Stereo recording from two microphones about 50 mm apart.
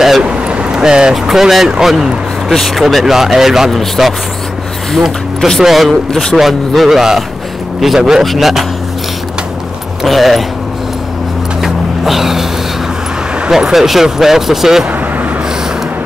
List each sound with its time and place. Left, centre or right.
0.2 s vehicle: right
1.1 s speech: centre
5.6 s speech: centre
10.0 s speech: centre
11.6 s music: centre
13.5 s speech: centre
14.9 s a sound: right